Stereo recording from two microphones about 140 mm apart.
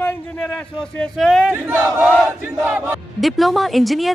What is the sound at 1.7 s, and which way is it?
Battle cry, 15° right (ahead or behind).